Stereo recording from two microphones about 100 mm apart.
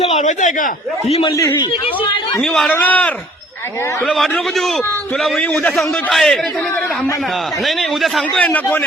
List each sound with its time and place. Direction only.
2.4 s a man's voice: 10° left (ahead or behind)
4.0 s a man's voice: 5° left (ahead or behind)
5.7 s a man's voice: centre (ahead or behind)
7.8 s a man's voice: centre (ahead or behind)
8.4 s a man's voice: 15° left (ahead or behind)